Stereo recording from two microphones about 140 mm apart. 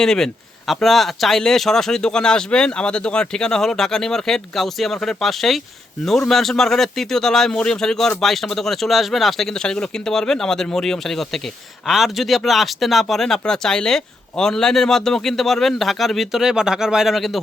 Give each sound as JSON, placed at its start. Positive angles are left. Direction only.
{"t": 0.0, "sound": "speech", "side_deg": 5}